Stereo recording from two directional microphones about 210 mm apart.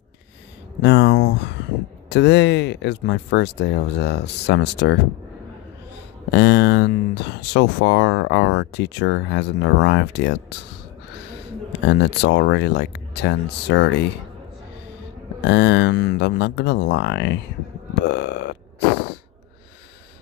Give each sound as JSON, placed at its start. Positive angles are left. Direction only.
{"t": 0.8, "sound": "speech", "side_deg": 55}
{"t": 6.3, "sound": "speech", "side_deg": 55}
{"t": 11.8, "sound": "speech", "side_deg": 55}
{"t": 15.4, "sound": "speech", "side_deg": 55}
{"t": 18.1, "sound": "burping", "side_deg": 55}